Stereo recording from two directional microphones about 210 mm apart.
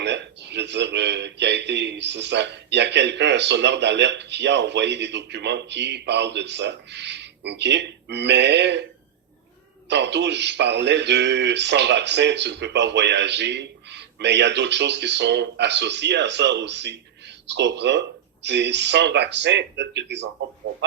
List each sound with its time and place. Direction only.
0.0 s speech: 55° right (ahead or behind)
9.9 s speech: 55° right (ahead or behind)